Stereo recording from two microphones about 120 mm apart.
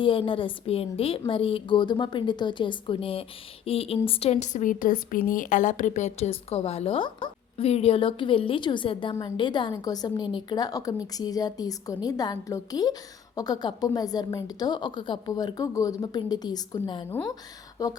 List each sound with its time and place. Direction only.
0.0 s a woman's voice: 45° left (ahead or behind)
17.8 s speech: 30° left (ahead or behind)